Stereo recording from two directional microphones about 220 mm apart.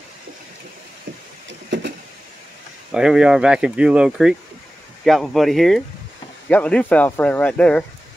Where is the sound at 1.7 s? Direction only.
55° right (ahead or behind).